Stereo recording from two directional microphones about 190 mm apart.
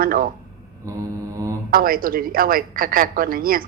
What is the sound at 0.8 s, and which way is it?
Mantra, 15° right (ahead or behind).